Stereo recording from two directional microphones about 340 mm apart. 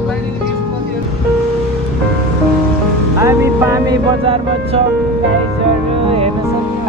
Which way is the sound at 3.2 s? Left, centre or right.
Centre.